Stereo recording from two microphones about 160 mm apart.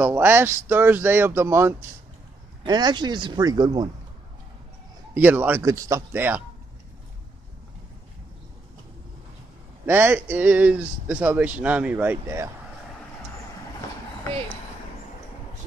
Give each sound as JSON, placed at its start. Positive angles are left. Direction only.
{"t": 0.0, "sound": "speech", "side_deg": -10}
{"t": 2.6, "sound": "speech", "side_deg": -25}
{"t": 5.1, "sound": "speech", "side_deg": -10}
{"t": 9.8, "sound": "speech", "side_deg": -15}